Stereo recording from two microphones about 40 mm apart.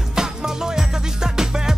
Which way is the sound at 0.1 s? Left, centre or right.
Centre.